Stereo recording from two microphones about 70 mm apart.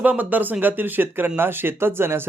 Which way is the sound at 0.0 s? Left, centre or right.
Right.